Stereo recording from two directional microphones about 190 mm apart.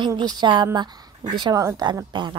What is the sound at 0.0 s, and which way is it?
A woman's voice, 20° right (ahead or behind).